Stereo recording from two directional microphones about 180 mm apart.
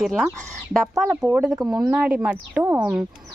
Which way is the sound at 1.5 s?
20° right (ahead or behind).